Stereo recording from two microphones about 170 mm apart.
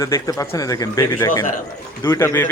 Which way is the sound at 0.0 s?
20° left (ahead or behind).